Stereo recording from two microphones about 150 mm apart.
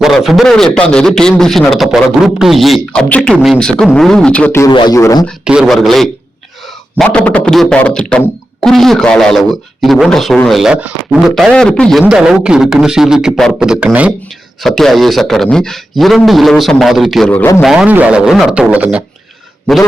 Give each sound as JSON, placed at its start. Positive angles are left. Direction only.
{"t": 0.0, "sound": "speech", "side_deg": 0}
{"t": 4.6, "sound": "speech", "side_deg": 30}
{"t": 5.5, "sound": "speech", "side_deg": -5}
{"t": 14.6, "sound": "speech", "side_deg": 0}
{"t": 17.3, "sound": "speech", "side_deg": 15}
{"t": 17.6, "sound": "a man's voice", "side_deg": -5}